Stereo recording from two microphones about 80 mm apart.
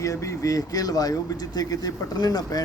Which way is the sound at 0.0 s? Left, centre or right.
Left.